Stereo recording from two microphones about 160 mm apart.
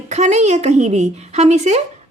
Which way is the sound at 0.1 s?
45° right (ahead or behind).